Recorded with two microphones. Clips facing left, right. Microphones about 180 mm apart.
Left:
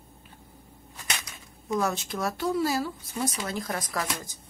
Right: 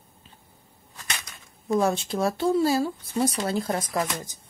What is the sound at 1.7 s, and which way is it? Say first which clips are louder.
Speech: right 5 dB; 30° right (ahead or behind).